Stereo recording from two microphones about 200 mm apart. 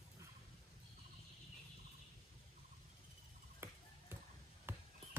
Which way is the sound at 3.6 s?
10° right (ahead or behind).